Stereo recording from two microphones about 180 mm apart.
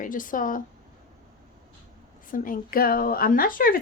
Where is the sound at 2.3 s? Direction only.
50° left (ahead or behind).